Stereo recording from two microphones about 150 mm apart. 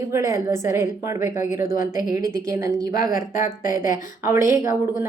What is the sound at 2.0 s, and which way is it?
Speech, 25° right (ahead or behind).